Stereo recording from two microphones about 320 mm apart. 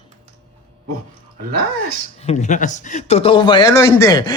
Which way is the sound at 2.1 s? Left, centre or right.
Left.